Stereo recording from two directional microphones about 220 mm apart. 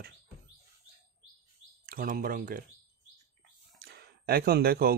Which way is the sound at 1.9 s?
40° right (ahead or behind).